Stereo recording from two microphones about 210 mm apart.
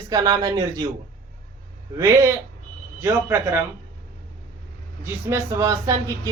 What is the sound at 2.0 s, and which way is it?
Speech, 15° right (ahead or behind).